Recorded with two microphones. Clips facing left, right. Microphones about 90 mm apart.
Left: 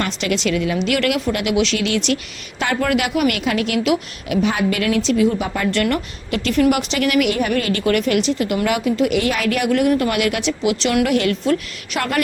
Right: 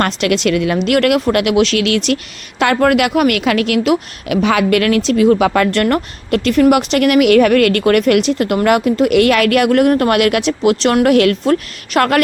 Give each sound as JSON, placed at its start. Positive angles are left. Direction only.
{"t": 0.0, "sound": "speech", "side_deg": -60}
{"t": 5.8, "sound": "speech", "side_deg": -50}